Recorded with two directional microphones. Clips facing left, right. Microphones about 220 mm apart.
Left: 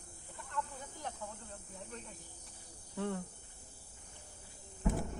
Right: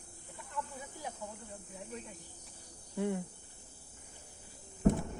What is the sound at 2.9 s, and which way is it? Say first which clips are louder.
Cricket: right 4 dB; 15° right (ahead or behind).